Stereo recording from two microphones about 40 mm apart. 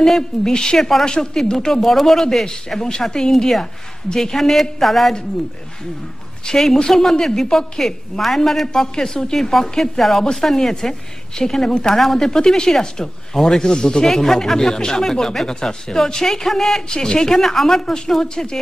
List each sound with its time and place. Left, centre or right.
0.0 s speech: centre
1.0 s a woman's voice: centre
6.4 s a woman's voice: centre
12.3 s speech: centre